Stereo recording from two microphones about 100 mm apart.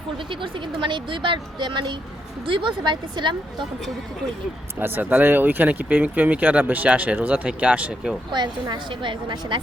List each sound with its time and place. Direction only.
0.3 s speech: 60° right (ahead or behind)
4.8 s speech: 20° right (ahead or behind)
8.3 s speech: 45° right (ahead or behind)